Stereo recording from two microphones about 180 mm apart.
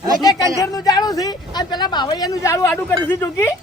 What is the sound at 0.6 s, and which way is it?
Speech, 20° left (ahead or behind).